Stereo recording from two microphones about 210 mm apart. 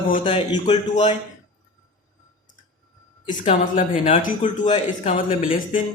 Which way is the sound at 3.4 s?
25° left (ahead or behind).